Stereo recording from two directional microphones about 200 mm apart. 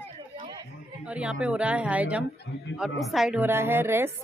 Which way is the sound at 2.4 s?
60° left (ahead or behind).